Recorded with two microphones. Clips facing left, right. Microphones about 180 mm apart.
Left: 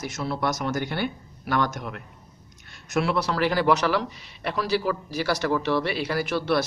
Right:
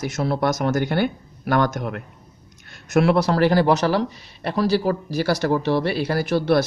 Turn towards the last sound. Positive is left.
turn(degrees=-40)  # may be behind; listen again after turning